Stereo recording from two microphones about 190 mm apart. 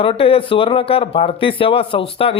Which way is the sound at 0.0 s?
30° left (ahead or behind).